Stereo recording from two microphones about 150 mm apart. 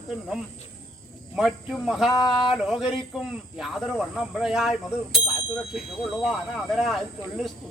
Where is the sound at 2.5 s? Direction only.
5° right (ahead or behind).